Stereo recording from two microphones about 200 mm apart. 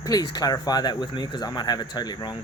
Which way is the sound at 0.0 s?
20° left (ahead or behind).